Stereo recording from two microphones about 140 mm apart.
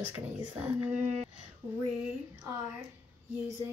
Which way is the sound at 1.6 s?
30° right (ahead or behind).